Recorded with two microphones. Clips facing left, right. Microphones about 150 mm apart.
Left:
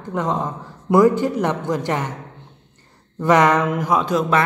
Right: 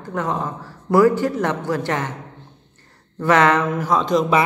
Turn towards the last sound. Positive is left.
turn(degrees=10)  # may be behind; listen again after turning